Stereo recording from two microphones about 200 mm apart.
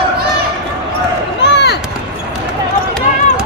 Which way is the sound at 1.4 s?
60° left (ahead or behind).